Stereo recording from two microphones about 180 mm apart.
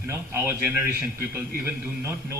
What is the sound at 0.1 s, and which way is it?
Speech, 10° right (ahead or behind).